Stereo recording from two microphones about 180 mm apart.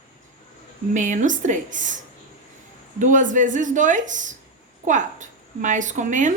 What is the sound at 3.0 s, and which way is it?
A woman's voice, 45° right (ahead or behind).